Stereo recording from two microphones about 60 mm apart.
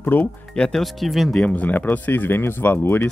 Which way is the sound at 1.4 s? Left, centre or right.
Left.